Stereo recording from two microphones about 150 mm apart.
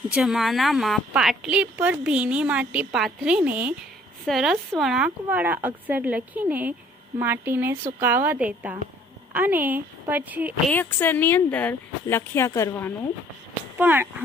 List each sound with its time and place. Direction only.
0.1 s a woman's voice: 5° right (ahead or behind)
10.7 s speech: 15° left (ahead or behind)
13.7 s a woman's voice: 10° right (ahead or behind)